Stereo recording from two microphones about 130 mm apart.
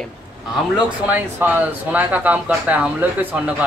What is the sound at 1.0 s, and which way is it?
Speech, 15° right (ahead or behind).